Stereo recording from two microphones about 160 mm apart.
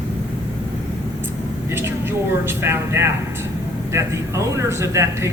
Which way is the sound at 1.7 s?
15° right (ahead or behind).